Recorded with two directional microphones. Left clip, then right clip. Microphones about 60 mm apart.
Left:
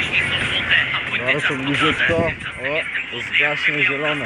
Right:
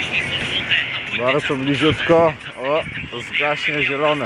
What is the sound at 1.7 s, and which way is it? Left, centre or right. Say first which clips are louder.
Speech: even; right.